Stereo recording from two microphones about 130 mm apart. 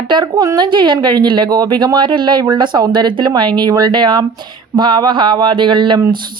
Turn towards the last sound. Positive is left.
turn(degrees=-35)  # may be behind; listen again after turning